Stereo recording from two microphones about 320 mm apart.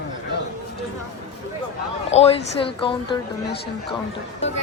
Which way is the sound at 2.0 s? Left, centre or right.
Centre.